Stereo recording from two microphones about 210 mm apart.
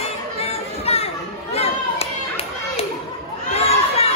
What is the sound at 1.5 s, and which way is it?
Children playing, 30° left (ahead or behind).